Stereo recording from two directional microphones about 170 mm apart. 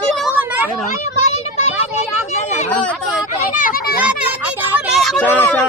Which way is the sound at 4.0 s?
10° right (ahead or behind).